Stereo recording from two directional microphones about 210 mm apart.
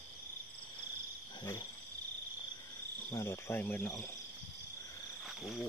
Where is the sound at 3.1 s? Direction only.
10° left (ahead or behind).